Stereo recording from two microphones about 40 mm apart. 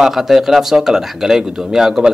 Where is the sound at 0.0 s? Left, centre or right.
Centre.